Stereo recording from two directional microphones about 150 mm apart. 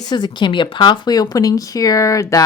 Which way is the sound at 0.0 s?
30° left (ahead or behind).